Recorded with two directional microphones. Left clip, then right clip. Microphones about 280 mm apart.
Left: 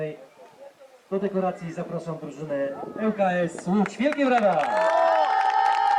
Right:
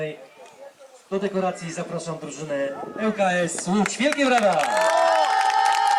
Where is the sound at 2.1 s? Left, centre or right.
Centre.